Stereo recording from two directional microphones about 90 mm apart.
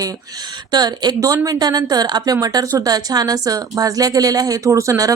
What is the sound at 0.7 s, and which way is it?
A woman's voice, 50° right (ahead or behind).